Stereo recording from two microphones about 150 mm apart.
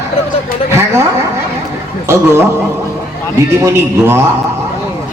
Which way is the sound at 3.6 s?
15° right (ahead or behind).